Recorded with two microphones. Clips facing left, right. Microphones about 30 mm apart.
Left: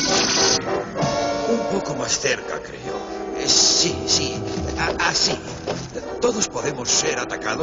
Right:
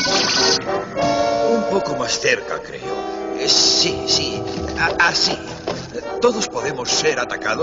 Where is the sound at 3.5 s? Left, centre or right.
Right.